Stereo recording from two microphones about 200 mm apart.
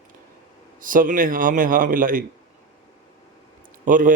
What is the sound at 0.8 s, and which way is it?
A man's voice, 45° right (ahead or behind).